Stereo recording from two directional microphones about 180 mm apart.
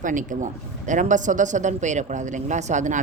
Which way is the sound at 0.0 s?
45° right (ahead or behind).